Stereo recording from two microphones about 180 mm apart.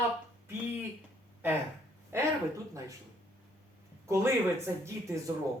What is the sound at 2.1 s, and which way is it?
Speech, 15° right (ahead or behind).